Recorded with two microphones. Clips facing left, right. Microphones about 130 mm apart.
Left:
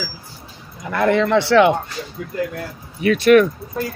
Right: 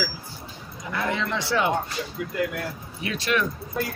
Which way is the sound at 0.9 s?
60° left (ahead or behind).